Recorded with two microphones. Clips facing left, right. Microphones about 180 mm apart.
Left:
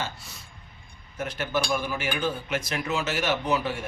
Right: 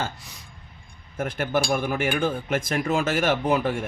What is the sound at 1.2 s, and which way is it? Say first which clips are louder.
Speech: right 4 dB; 50° right (ahead or behind).